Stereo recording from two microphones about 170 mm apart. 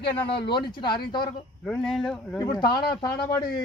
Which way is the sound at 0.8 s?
25° left (ahead or behind).